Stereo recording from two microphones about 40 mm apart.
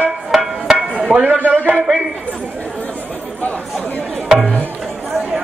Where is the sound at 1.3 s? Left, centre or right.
Right.